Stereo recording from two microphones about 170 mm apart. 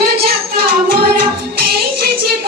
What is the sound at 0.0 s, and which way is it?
Music, 65° right (ahead or behind).